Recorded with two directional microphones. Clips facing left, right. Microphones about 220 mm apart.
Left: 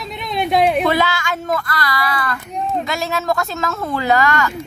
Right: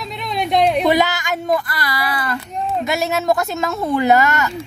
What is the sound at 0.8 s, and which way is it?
Child singing, 15° right (ahead or behind).